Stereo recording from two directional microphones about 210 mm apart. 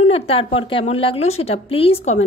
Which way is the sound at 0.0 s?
30° left (ahead or behind).